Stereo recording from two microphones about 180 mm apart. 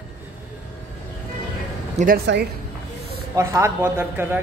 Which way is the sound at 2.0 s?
40° right (ahead or behind).